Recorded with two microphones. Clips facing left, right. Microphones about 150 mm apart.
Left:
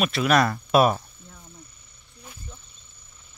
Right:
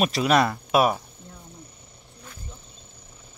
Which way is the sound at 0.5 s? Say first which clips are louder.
Left 2 dB; 10° right (ahead or behind).